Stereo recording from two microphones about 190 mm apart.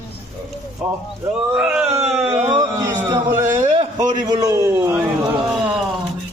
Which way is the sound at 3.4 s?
40° right (ahead or behind).